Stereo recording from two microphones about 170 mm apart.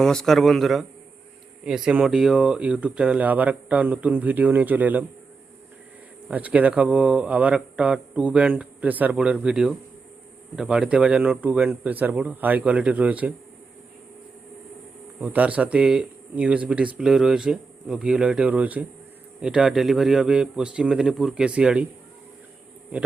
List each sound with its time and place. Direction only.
0.0 s a man's voice: 5° left (ahead or behind)
6.2 s speech: 10° right (ahead or behind)
15.2 s a man's voice: 10° right (ahead or behind)